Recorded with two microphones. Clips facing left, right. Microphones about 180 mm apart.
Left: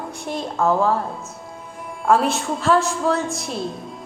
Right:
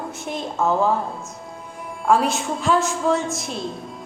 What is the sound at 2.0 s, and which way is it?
Speech, centre (ahead or behind).